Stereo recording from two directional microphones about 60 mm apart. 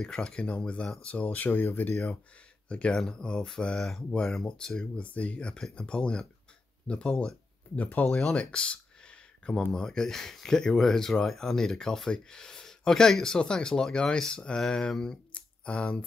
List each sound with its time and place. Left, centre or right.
0.0 s speech: centre; by 2.0 s left
2.7 s speech: centre
7.7 s speech: left
8.2 s a sound: centre
9.7 s speech: centre